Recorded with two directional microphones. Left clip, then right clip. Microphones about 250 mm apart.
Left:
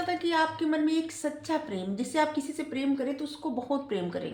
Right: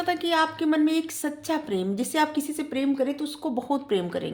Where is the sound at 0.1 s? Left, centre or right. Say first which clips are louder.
Right 4 dB; right.